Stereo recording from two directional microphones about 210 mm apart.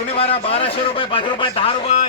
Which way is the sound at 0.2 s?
30° left (ahead or behind).